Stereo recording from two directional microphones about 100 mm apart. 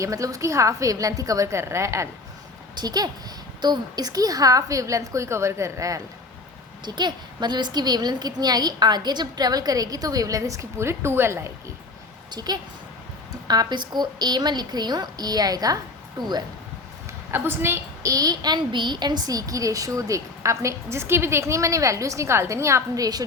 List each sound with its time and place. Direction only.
0.0 s a woman's voice: 35° right (ahead or behind)
2.7 s a woman's voice: 40° right (ahead or behind)
6.8 s a woman's voice: 45° right (ahead or behind); by 11.5 s 25° right (ahead or behind)
12.3 s a woman's voice: 45° right (ahead or behind)
17.3 s a woman's voice: 25° right (ahead or behind)
18.1 s a woman's voice: 40° right (ahead or behind)